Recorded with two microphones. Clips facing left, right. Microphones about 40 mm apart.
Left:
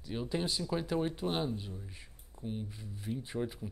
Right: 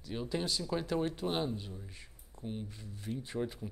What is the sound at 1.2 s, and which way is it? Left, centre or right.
Speech, centre.